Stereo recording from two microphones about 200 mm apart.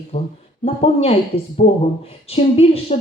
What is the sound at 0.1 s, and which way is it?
Speech, 30° left (ahead or behind).